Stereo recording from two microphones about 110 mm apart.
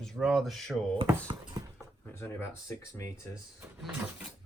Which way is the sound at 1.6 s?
35° right (ahead or behind).